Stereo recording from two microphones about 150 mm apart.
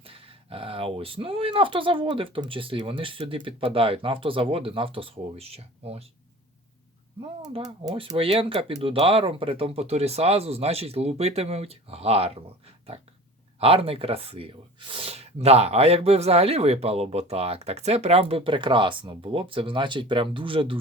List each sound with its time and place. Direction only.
0.0 s speech: 40° right (ahead or behind)
7.2 s speech: 30° right (ahead or behind)